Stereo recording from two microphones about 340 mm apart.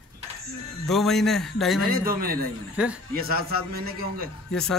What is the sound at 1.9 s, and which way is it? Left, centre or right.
Speech, right.